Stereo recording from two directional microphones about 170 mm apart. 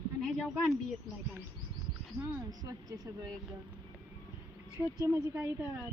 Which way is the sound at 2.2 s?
20° right (ahead or behind).